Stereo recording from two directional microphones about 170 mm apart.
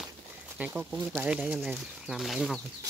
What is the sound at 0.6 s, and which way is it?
Speech, 5° right (ahead or behind).